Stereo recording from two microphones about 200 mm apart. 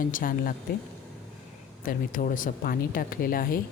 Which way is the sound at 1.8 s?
45° left (ahead or behind).